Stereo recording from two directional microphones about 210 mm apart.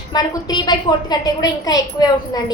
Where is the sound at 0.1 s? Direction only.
20° left (ahead or behind).